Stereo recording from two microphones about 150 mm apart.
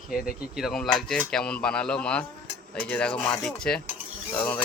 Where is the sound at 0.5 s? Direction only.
Centre (ahead or behind).